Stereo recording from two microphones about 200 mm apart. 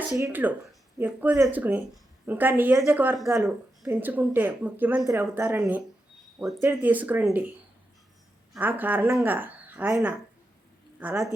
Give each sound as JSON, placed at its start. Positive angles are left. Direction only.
{"t": 0.0, "sound": "speech", "side_deg": -10}
{"t": 8.8, "sound": "speech", "side_deg": -10}